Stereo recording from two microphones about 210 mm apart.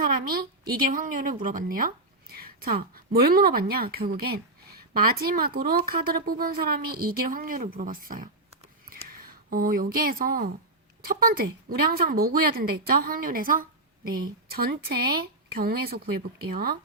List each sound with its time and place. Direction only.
0.0 s a woman's voice: 45° right (ahead or behind)